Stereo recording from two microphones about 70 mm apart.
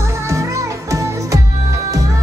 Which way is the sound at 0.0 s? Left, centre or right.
Right.